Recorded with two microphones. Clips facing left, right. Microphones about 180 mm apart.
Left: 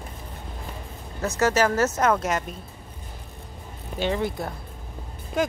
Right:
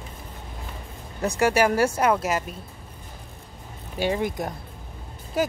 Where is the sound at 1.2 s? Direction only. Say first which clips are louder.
Right 1 dB; 15° right (ahead or behind).